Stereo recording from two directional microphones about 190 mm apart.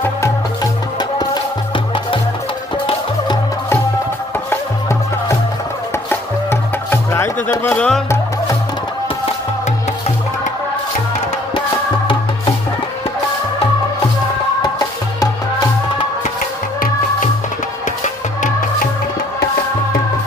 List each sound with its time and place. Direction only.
4.5 s music: 15° left (ahead or behind)
14.6 s music: 20° left (ahead or behind)
18.0 s music: 40° left (ahead or behind)